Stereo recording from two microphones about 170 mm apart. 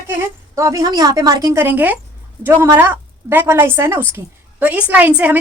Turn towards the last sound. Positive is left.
turn(degrees=-10)  # may be behind; listen again after turning